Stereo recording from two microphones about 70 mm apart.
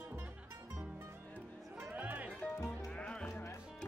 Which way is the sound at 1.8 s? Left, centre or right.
Right.